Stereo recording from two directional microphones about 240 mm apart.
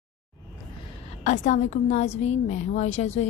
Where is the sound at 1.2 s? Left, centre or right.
Left.